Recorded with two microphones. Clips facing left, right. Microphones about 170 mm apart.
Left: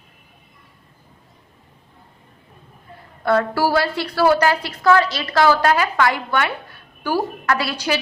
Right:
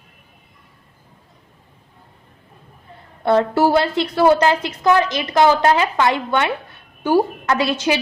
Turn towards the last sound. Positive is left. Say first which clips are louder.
# right 3 dB
turn(degrees=-20)  # may be behind; listen again after turning